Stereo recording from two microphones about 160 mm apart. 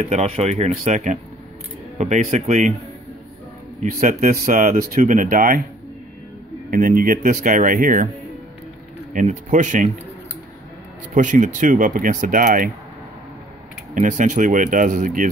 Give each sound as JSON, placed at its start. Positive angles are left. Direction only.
{"t": 0.1, "sound": "speech", "side_deg": -45}
{"t": 3.8, "sound": "speech", "side_deg": -60}
{"t": 6.7, "sound": "speech", "side_deg": -60}
{"t": 9.1, "sound": "speech", "side_deg": -50}
{"t": 11.1, "sound": "speech", "side_deg": -50}
{"t": 13.9, "sound": "speech", "side_deg": -50}